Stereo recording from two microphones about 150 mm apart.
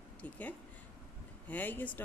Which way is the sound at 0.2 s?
10° left (ahead or behind).